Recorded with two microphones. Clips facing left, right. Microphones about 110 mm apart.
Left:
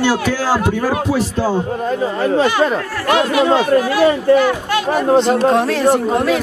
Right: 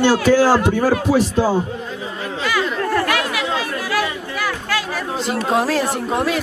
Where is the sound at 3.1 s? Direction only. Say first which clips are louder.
Left 7 dB; 25° left (ahead or behind).